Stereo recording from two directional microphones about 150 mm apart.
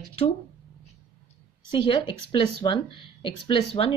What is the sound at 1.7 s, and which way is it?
Speech, 35° left (ahead or behind).